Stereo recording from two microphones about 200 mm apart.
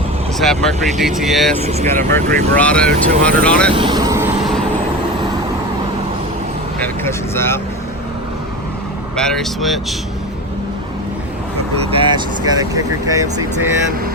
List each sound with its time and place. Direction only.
0.3 s speech: centre (ahead or behind)
1.5 s speech: 30° right (ahead or behind)
2.0 s speech: 10° left (ahead or behind)
3.7 s speech: 25° right (ahead or behind)
6.7 s speech: 10° left (ahead or behind)
9.1 s speech: 5° left (ahead or behind)
11.9 s speech: 25° right (ahead or behind)